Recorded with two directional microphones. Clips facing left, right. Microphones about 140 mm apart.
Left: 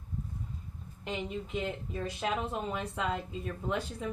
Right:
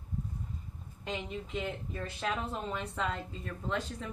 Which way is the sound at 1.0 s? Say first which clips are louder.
Left 2 dB; 5° left (ahead or behind).